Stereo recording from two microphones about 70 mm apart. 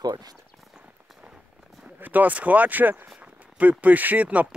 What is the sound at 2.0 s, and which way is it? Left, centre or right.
Speech, right.